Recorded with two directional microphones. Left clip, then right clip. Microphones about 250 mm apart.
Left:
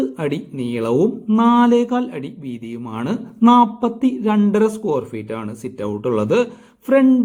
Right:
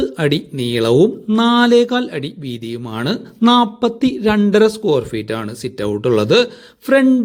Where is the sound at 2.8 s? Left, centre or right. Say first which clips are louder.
Right 3 dB; right.